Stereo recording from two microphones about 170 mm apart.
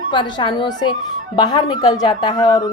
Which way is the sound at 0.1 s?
25° left (ahead or behind).